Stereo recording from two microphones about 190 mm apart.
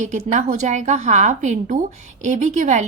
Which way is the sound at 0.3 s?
40° right (ahead or behind).